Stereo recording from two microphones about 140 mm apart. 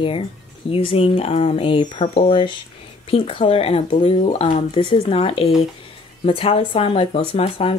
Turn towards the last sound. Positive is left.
turn(degrees=40)  # may be behind; listen again after turning